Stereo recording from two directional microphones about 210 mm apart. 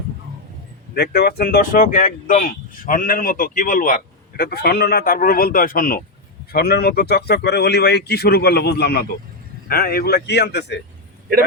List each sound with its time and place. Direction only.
0.9 s speech: 50° left (ahead or behind)